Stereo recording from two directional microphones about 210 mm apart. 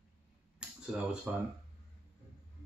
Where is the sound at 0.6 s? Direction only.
5° right (ahead or behind).